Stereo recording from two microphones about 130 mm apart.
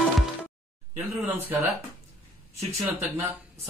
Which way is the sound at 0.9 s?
15° right (ahead or behind).